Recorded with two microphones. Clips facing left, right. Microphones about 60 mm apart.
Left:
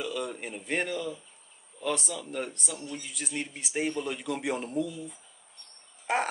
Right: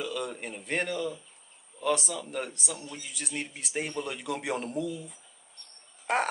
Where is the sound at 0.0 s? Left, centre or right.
Centre.